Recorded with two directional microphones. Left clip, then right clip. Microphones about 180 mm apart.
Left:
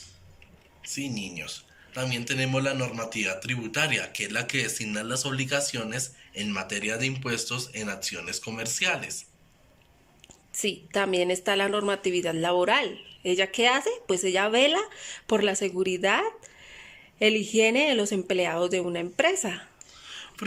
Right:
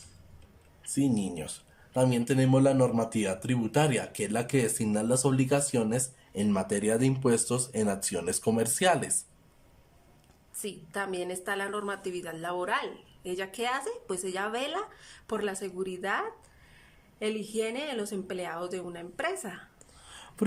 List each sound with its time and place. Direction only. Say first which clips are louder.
0.8 s speech: right 4 dB; 55° right (ahead or behind)
10.6 s a woman's voice: left 8 dB; 15° left (ahead or behind)